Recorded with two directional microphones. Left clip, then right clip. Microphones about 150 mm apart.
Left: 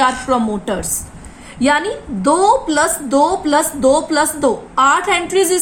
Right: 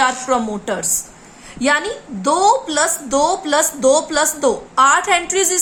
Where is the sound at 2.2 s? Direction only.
5° right (ahead or behind).